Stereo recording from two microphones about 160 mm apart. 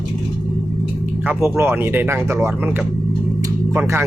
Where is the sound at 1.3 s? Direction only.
15° right (ahead or behind).